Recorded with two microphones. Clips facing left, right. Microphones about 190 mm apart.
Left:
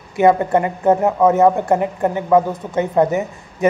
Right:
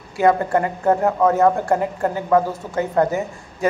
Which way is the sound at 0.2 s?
20° left (ahead or behind).